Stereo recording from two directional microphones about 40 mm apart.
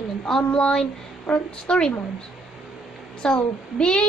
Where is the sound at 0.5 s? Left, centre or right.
Left.